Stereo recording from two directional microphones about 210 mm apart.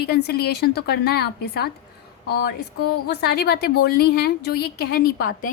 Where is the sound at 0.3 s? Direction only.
50° left (ahead or behind).